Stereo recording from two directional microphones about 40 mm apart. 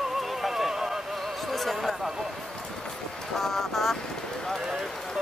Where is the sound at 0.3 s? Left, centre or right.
Centre.